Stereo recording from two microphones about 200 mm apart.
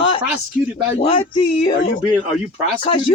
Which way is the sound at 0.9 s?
25° left (ahead or behind).